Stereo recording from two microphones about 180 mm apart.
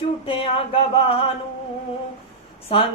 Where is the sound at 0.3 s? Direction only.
30° left (ahead or behind).